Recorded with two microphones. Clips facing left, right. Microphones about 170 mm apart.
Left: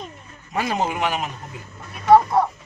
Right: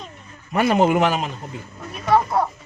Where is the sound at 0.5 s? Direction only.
60° right (ahead or behind).